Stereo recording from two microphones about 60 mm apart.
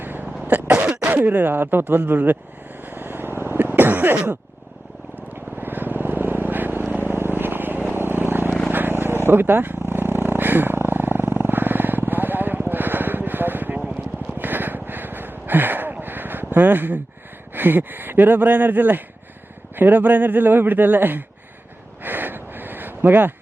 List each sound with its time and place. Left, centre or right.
0.0 s cough: right
0.9 s throat clearing: centre
1.1 s speech: right
1.5 s speech: right
2.8 s vehicle: right
5.5 s vehicle: right
14.3 s a sound: right
17.5 s speech: right
22.0 s a sound: right